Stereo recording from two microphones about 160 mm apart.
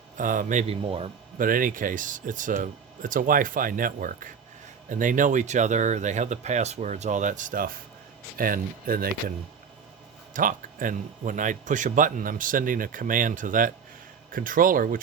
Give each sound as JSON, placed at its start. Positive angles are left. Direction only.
{"t": 0.2, "sound": "speech", "side_deg": -55}
{"t": 10.3, "sound": "speech", "side_deg": -55}